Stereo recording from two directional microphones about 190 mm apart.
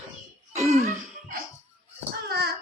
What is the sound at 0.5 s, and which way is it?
Throat clearing, 35° right (ahead or behind).